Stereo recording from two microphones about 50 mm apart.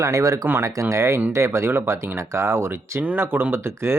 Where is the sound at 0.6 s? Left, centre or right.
Right.